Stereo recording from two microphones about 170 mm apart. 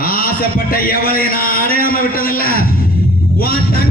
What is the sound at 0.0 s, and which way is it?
A man's voice, 60° left (ahead or behind).